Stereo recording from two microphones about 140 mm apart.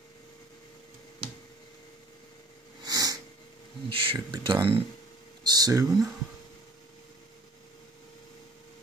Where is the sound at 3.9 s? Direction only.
40° right (ahead or behind).